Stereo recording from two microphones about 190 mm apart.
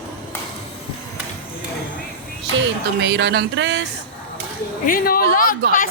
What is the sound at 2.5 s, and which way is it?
Speech, 70° right (ahead or behind).